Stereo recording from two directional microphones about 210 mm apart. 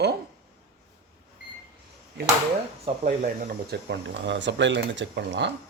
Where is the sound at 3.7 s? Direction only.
55° right (ahead or behind).